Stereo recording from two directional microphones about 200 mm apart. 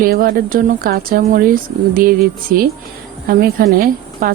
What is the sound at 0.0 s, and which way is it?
A woman's voice, 45° right (ahead or behind).